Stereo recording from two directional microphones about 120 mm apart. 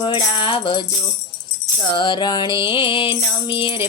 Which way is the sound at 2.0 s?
40° left (ahead or behind).